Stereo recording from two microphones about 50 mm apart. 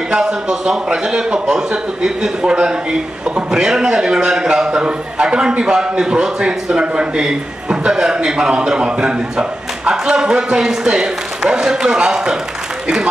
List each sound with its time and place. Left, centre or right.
0.1 s a man's voice: centre